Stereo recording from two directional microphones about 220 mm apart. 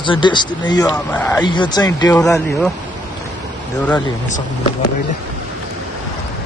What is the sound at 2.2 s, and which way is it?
Speech, centre (ahead or behind).